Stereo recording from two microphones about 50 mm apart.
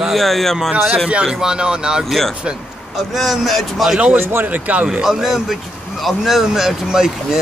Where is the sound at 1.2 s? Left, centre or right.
Centre.